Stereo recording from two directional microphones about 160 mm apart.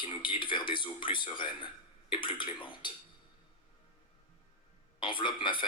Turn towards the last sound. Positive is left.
turn(degrees=30)  # may be behind; listen again after turning